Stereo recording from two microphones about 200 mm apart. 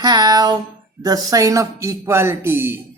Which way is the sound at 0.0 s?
20° right (ahead or behind).